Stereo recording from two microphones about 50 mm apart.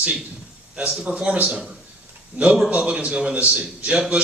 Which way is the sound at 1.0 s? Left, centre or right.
Right.